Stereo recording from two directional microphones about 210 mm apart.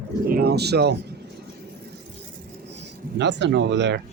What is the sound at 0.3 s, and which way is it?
Speech, 45° right (ahead or behind).